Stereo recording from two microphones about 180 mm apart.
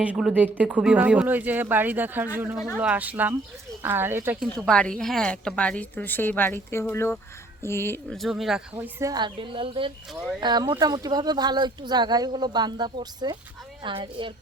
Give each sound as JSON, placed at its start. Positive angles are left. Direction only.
{"t": 0.0, "sound": "speech", "side_deg": -5}
{"t": 4.4, "sound": "a woman's voice", "side_deg": 5}
{"t": 8.2, "sound": "speech", "side_deg": 0}
{"t": 10.1, "sound": "speech", "side_deg": 0}
{"t": 10.4, "sound": "speech", "side_deg": -25}